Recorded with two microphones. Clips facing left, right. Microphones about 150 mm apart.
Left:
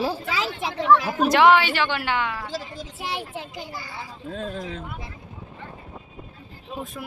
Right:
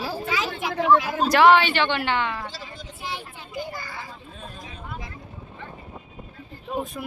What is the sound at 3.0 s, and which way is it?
Speech, 80° left.